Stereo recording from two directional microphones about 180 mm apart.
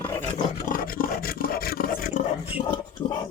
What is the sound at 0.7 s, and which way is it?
Roaring cats, 50° left (ahead or behind).